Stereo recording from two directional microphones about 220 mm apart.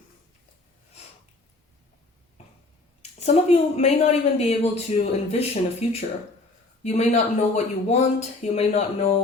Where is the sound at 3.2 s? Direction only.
30° left (ahead or behind).